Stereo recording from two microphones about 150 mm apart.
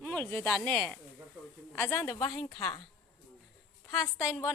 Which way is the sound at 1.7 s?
15° left (ahead or behind).